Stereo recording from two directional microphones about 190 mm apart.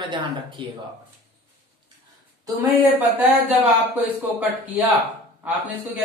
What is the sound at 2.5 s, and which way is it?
Speech, 10° right (ahead or behind).